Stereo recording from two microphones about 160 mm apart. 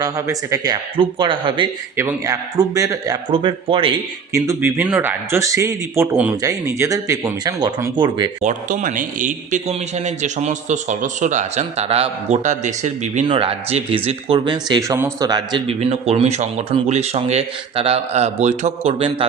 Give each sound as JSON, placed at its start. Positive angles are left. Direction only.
{"t": 0.0, "sound": "speech", "side_deg": -20}
{"t": 2.0, "sound": "speech", "side_deg": -20}
{"t": 4.4, "sound": "a man's voice", "side_deg": -15}
{"t": 8.4, "sound": "a man's voice", "side_deg": -55}
{"t": 13.2, "sound": "speech", "side_deg": -35}
{"t": 15.8, "sound": "a man's voice", "side_deg": -40}